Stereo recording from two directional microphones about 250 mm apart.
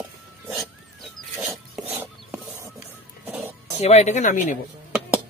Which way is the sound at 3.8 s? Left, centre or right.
Left.